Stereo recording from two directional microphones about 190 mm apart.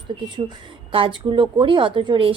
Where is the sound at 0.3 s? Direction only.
25° right (ahead or behind).